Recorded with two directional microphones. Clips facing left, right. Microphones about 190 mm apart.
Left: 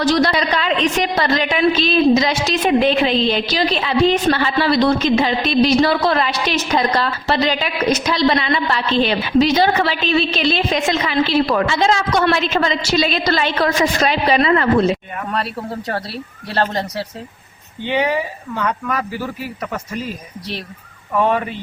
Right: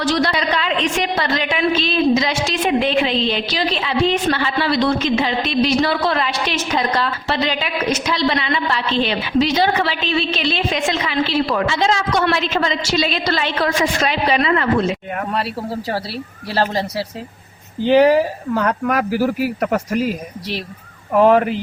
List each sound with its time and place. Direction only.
0.0 s a woman's voice: 40° left (ahead or behind)
15.3 s speech: 5° right (ahead or behind)
18.5 s speech: 45° right (ahead or behind)
20.0 s speech: 10° right (ahead or behind)